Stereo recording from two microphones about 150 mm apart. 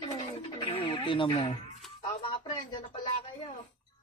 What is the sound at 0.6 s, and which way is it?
Music, 40° left (ahead or behind).